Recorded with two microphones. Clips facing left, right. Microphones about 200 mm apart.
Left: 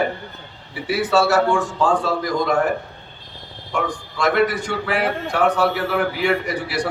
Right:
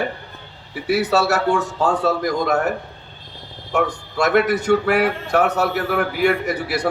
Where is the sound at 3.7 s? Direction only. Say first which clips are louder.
Right 4 dB; 45° right (ahead or behind).